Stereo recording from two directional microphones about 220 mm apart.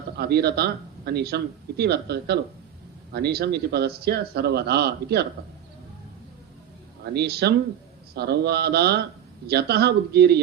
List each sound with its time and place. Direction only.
0.2 s speech: 45° right (ahead or behind)
7.0 s speech: 45° right (ahead or behind)